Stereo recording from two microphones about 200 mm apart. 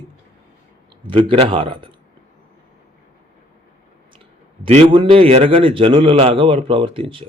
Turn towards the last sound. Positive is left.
turn(degrees=-25)  # may be behind; listen again after turning